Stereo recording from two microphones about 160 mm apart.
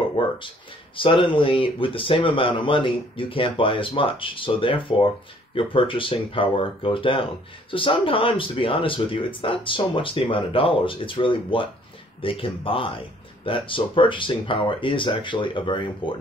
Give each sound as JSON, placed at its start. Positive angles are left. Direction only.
{"t": 0.9, "sound": "speech", "side_deg": 30}